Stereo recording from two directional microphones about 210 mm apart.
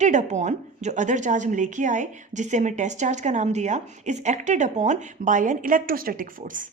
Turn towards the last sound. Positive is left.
turn(degrees=-40)  # may be behind; listen again after turning